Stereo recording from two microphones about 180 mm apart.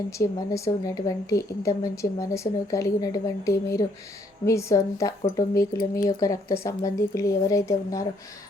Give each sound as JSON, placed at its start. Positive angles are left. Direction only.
{"t": 0.1, "sound": "a woman's voice", "side_deg": 15}